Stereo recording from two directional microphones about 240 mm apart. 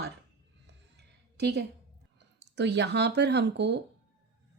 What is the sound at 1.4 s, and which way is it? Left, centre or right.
A woman's voice, right.